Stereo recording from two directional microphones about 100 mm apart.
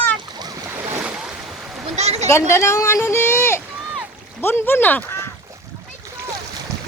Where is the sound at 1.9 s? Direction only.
90° right.